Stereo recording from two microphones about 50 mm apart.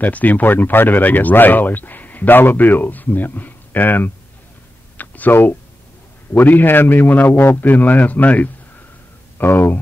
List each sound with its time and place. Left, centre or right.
0.0 s speech: left
4.9 s a sound: left
5.3 s speech: left
7.3 s speech: left
7.6 s speech: left
9.4 s speech: left